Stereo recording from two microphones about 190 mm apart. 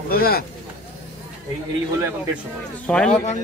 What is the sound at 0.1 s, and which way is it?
Speech, 50° left (ahead or behind).